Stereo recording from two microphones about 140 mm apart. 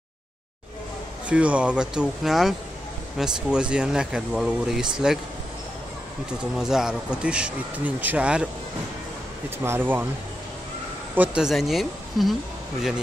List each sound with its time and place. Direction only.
1.3 s speech: 10° right (ahead or behind)
6.5 s speech: 5° right (ahead or behind)
9.6 s speech: 15° right (ahead or behind)
11.1 s speech: 5° right (ahead or behind)